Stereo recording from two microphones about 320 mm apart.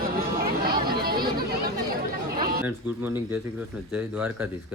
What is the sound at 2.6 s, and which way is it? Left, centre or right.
Speech, centre.